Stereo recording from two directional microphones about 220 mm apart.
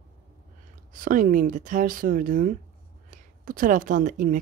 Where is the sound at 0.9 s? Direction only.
40° right (ahead or behind).